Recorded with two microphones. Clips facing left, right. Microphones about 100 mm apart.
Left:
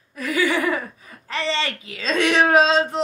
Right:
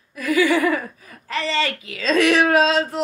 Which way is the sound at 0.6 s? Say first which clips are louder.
Right 3 dB; 30° left (ahead or behind).